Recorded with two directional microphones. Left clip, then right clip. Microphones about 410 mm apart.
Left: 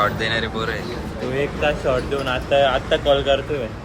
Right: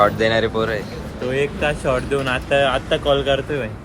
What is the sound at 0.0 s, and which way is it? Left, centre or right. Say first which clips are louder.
Speech: right 5 dB; centre.